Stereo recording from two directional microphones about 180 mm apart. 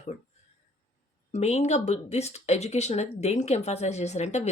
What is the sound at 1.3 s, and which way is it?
Speech, 40° left (ahead or behind).